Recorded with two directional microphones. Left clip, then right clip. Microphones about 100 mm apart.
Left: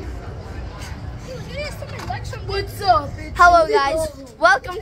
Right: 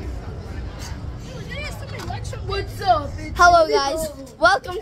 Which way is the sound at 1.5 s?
45° left (ahead or behind).